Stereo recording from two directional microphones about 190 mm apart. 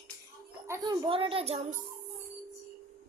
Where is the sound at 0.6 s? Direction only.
15° right (ahead or behind); by 1.8 s 35° right (ahead or behind).